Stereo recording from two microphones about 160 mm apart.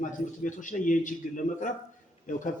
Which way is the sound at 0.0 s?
55° left (ahead or behind).